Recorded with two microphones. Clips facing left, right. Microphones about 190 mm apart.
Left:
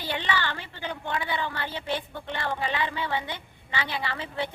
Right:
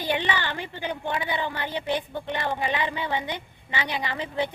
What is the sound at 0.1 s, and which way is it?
Speech, 15° right (ahead or behind).